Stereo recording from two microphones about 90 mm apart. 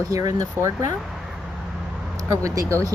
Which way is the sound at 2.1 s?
40° right (ahead or behind).